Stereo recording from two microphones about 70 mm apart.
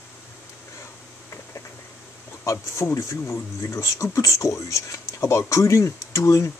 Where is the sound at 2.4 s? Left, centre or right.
Left.